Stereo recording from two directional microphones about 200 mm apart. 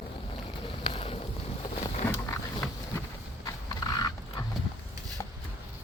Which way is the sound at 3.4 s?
20° left (ahead or behind).